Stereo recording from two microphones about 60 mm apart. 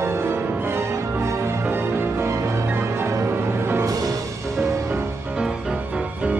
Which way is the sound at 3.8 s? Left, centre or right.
Right.